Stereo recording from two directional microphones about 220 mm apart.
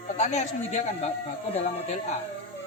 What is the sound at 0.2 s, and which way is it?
Speech, 30° left (ahead or behind).